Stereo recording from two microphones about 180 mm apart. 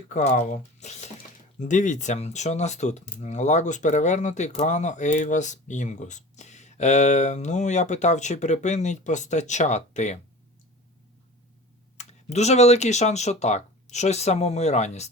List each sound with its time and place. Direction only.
0.1 s speech: 40° left (ahead or behind)
11.9 s speech: 40° left (ahead or behind)